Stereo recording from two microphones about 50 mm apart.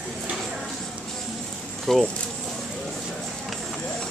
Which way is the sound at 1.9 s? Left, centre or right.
Centre.